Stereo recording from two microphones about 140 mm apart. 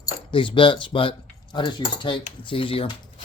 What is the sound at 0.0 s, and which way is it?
Speech, 35° left (ahead or behind).